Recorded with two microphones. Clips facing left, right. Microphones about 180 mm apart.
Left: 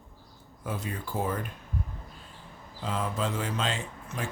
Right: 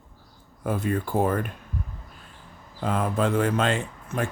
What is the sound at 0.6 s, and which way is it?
Speech, 55° right (ahead or behind).